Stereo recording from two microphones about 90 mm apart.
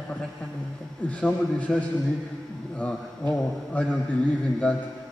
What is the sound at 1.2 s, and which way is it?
A man's voice, 15° left (ahead or behind).